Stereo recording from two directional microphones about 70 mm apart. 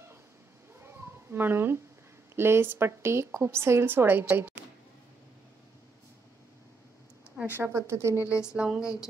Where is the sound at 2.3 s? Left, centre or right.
Right.